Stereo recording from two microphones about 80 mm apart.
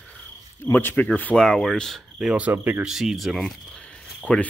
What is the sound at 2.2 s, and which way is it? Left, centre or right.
Speech, centre.